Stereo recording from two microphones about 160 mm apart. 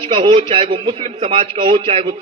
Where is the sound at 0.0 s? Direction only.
35° right (ahead or behind).